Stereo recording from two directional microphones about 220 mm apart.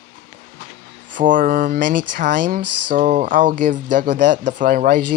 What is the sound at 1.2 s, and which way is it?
Speech, 40° right (ahead or behind).